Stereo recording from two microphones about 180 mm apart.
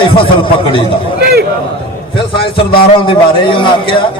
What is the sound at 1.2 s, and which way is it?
Speech, 60° right (ahead or behind).